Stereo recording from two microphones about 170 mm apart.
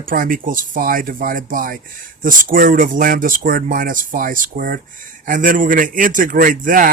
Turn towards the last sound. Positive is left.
turn(degrees=-55)  # may be behind; listen again after turning